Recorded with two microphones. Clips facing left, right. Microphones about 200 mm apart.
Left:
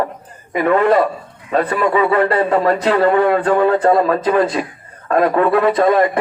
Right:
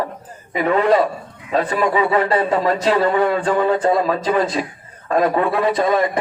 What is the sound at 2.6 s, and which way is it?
Speech, 55° left (ahead or behind).